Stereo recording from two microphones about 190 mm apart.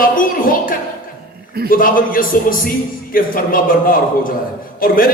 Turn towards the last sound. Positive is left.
turn(degrees=50)  # may be behind; listen again after turning